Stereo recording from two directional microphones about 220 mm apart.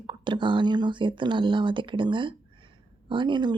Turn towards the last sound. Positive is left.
turn(degrees=-20)  # may be behind; listen again after turning